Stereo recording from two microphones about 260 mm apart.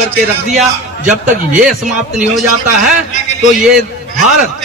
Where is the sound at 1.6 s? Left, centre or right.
Centre.